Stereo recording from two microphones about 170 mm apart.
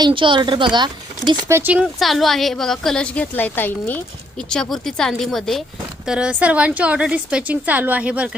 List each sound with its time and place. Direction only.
0.0 s speech: 30° right (ahead or behind)
1.5 s a woman's voice: 10° right (ahead or behind)